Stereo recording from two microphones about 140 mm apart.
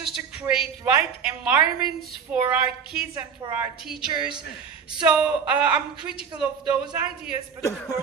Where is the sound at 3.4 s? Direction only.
40° right (ahead or behind).